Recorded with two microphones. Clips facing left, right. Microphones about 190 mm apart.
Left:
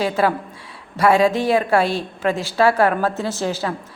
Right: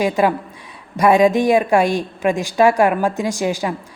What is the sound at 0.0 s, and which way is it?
Speech, 15° right (ahead or behind).